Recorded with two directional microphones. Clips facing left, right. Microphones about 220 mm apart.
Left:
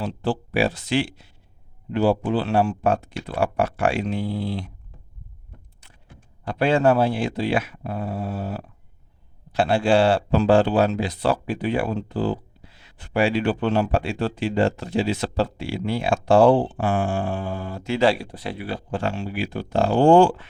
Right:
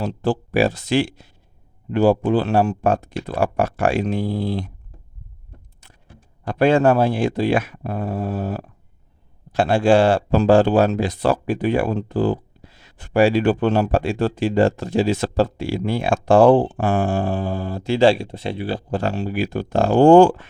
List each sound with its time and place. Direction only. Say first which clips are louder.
0.0 s speech: right 3 dB; 45° right (ahead or behind)
6.4 s speech: right 4 dB; 50° right (ahead or behind)